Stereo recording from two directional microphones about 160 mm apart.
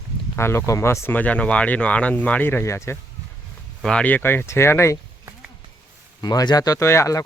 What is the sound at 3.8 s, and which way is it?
Speech, 5° left (ahead or behind).